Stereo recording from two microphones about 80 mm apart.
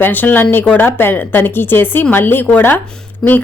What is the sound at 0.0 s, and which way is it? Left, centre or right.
A man's voice, left.